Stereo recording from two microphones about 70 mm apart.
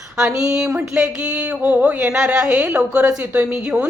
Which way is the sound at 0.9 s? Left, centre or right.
Centre.